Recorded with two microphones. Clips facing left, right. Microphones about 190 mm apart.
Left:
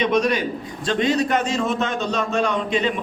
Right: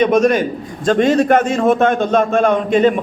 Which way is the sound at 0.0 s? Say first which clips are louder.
Right 7 dB; 45° right (ahead or behind).